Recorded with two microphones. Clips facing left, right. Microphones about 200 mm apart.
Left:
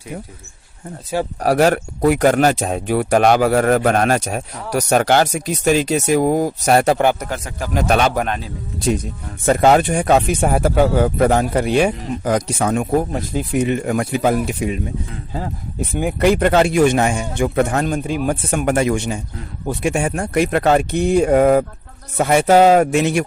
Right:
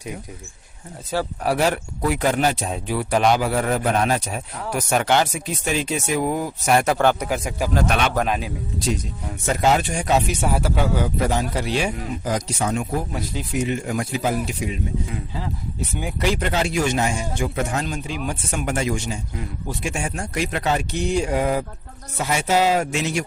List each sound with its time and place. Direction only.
1.4 s speech: 45° left (ahead or behind); by 4.4 s 65° left (ahead or behind)
4.7 s speech: 40° left (ahead or behind)
7.3 s speech: 10° right (ahead or behind)
7.9 s speech: 40° left (ahead or behind)
8.3 s speech: 15° right (ahead or behind)
9.5 s speech: 55° left (ahead or behind)